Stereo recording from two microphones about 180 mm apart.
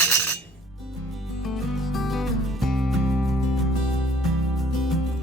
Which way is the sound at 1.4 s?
Centre (ahead or behind).